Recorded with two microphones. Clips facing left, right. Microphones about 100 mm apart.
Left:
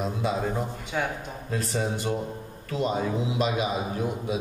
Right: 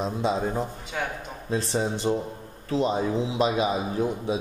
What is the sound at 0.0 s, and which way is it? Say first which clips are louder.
A man's voice: right 2 dB; 25° right (ahead or behind).